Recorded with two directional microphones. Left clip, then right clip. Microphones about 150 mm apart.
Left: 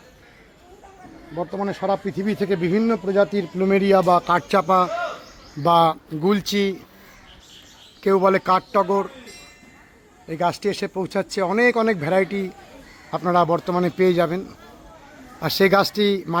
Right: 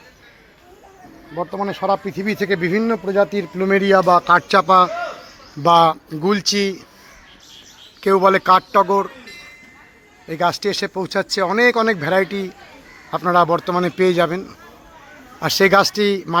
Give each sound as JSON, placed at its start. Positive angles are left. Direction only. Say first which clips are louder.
{"t": 1.4, "sound": "speech", "louder": "right 3 dB", "side_deg": -5}
{"t": 8.0, "sound": "speech", "louder": "right 4 dB", "side_deg": 0}
{"t": 10.2, "sound": "speech", "louder": "right 3 dB", "side_deg": 0}